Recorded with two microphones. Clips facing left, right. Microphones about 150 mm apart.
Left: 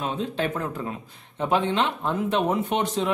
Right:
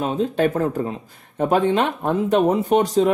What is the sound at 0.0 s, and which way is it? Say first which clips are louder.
Speech: right 7 dB; 40° right (ahead or behind).